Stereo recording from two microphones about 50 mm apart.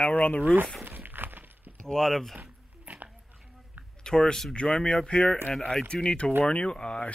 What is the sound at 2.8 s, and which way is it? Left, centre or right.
Dog, right.